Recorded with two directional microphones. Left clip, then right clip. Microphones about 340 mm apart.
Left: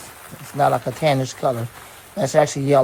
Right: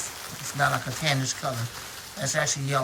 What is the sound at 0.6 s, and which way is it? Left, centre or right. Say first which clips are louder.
Speech: left 8 dB; centre.